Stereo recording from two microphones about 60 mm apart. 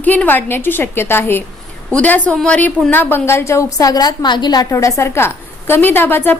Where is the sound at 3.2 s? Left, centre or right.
Left.